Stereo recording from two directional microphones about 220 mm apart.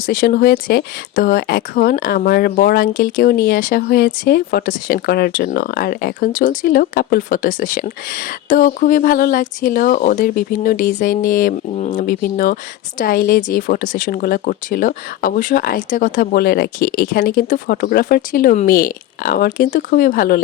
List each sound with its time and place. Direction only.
0.0 s speech: 40° left (ahead or behind)